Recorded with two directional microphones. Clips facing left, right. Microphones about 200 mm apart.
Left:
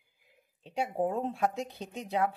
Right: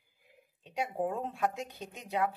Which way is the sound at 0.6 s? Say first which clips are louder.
Left 3 dB; 30° left (ahead or behind).